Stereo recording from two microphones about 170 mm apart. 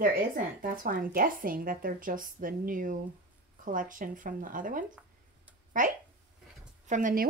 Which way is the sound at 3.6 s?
50° right (ahead or behind).